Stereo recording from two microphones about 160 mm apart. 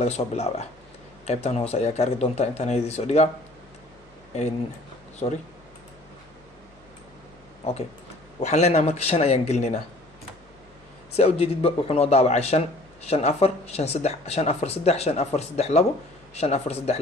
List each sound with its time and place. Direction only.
0.0 s a man's voice: 40° left (ahead or behind)
5.2 s a man's voice: 35° left (ahead or behind)
8.4 s a man's voice: 45° left (ahead or behind)
11.1 s a man's voice: 40° left (ahead or behind)